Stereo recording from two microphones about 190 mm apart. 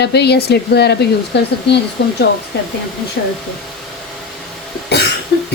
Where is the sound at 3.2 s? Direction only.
55° left (ahead or behind).